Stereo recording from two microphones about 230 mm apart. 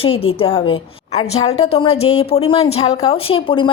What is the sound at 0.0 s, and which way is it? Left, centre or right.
A woman's voice, left.